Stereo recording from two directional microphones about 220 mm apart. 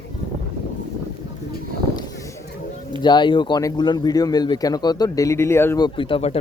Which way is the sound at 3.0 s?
20° left (ahead or behind).